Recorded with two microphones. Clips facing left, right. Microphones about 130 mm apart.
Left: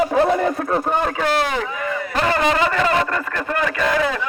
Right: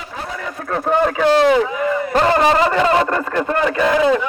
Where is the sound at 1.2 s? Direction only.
25° right (ahead or behind).